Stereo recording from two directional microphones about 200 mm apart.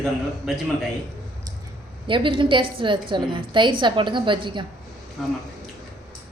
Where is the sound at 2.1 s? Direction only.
25° right (ahead or behind).